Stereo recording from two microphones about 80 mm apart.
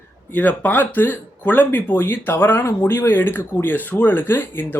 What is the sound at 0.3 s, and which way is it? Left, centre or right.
Speech, left.